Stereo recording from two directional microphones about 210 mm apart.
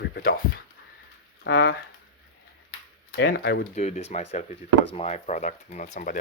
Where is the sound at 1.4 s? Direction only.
55° left (ahead or behind).